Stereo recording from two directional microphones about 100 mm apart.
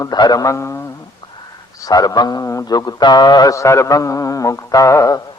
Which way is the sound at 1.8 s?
40° left (ahead or behind).